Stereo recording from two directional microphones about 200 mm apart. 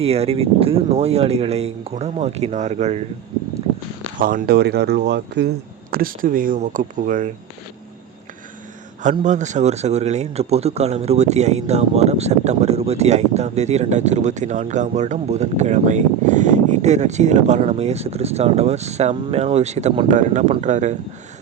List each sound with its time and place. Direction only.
0.0 s speech: 30° right (ahead or behind)
4.2 s speech: 45° right (ahead or behind)
5.9 s speech: 45° right (ahead or behind)
9.0 s speech: 40° right (ahead or behind)